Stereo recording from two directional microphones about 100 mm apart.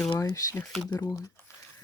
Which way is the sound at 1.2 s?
25° left (ahead or behind).